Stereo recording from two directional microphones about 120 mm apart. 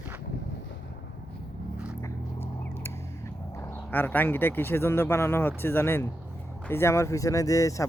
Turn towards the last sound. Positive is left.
turn(degrees=30)  # may be behind; listen again after turning